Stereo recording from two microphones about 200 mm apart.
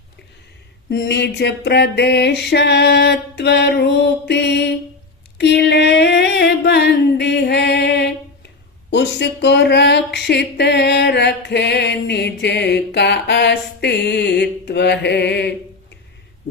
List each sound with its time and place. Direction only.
0.9 s speech: 55° left (ahead or behind)
5.4 s a sound: 60° left (ahead or behind)
8.9 s speech: 60° left (ahead or behind)